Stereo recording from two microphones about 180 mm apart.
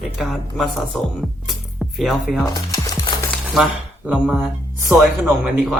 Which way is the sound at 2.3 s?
20° left (ahead or behind).